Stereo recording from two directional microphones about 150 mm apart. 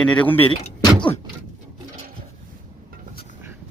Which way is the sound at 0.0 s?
10° left (ahead or behind).